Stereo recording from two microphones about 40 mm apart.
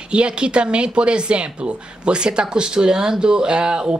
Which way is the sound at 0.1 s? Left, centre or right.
Right.